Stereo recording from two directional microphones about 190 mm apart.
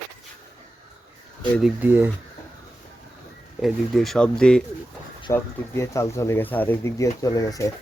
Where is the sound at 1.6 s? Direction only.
5° right (ahead or behind).